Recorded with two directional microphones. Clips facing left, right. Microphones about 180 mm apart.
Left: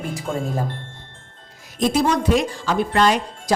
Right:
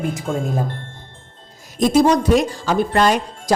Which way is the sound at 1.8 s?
40° right (ahead or behind).